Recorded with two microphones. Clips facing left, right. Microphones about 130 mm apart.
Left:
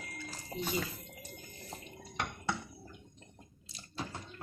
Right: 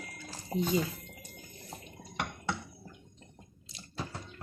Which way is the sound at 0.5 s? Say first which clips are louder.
Right 7 dB; 15° right (ahead or behind).